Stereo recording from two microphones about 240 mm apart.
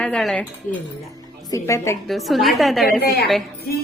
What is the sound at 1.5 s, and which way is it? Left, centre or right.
Speech, centre.